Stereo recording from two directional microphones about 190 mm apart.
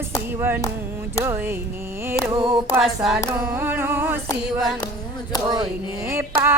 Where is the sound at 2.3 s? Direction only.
25° right (ahead or behind).